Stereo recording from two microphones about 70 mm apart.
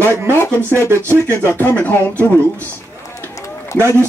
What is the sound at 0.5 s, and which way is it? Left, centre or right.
Speech, left.